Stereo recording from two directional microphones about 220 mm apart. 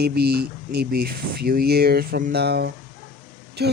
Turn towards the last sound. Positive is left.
turn(degrees=-50)  # may be behind; listen again after turning